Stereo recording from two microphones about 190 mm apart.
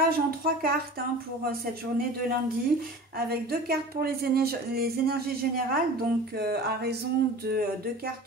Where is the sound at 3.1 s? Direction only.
55° right (ahead or behind).